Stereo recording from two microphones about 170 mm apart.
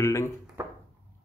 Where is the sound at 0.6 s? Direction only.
15° right (ahead or behind).